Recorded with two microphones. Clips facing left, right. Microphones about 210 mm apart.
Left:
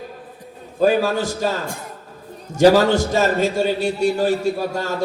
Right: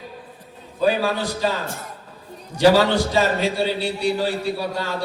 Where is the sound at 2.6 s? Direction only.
45° left (ahead or behind).